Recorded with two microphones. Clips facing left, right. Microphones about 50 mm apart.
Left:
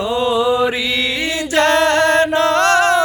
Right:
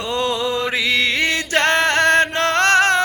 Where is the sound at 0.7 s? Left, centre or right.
Right.